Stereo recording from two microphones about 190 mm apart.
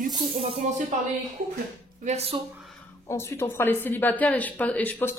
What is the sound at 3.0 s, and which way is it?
Speech, 15° left (ahead or behind).